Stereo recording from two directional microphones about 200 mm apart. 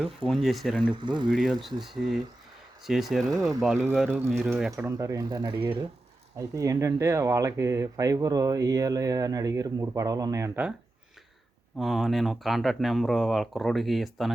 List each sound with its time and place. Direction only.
0.3 s speech: centre (ahead or behind)
0.8 s speech: 25° right (ahead or behind)
1.3 s speech: centre (ahead or behind)
4.9 s speech: 15° right (ahead or behind)
11.8 s speech: centre (ahead or behind)